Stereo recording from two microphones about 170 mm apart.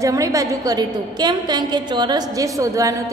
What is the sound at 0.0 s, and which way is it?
A woman's voice, 20° right (ahead or behind).